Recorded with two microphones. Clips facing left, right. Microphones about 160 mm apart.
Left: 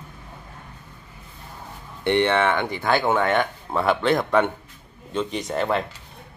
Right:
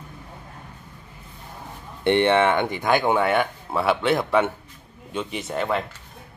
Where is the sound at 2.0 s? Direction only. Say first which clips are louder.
Right 2 dB; 20° right (ahead or behind).